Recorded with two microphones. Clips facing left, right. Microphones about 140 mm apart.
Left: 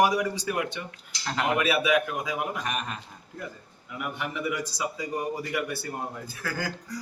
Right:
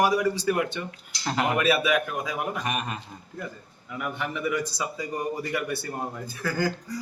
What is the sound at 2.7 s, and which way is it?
Speech, 5° right (ahead or behind).